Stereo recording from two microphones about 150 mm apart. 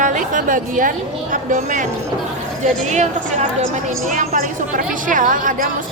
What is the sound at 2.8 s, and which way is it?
Speech, 50° right (ahead or behind).